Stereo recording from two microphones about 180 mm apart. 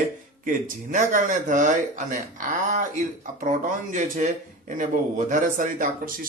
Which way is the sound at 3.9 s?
45° right (ahead or behind).